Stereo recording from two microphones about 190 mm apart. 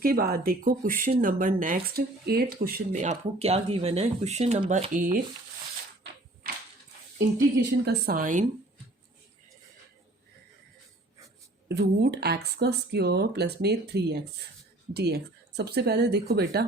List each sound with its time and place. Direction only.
0.0 s speech: 50° right (ahead or behind)
2.9 s speech: 40° right (ahead or behind)
6.4 s a sound: 50° right (ahead or behind)
7.9 s speech: 50° right (ahead or behind)
11.7 s speech: 60° right (ahead or behind)